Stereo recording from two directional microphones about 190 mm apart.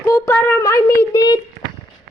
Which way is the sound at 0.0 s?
15° left (ahead or behind).